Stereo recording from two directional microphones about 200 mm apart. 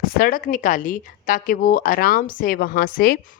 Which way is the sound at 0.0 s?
45° left (ahead or behind).